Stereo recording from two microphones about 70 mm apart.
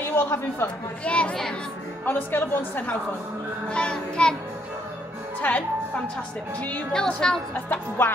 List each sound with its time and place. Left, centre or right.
0.0 s speech: left
1.0 s a child's voice: centre
2.0 s a woman's voice: left
3.6 s a child's voice: centre
5.4 s a woman's voice: left
6.9 s a child's voice: centre
8.0 s music: left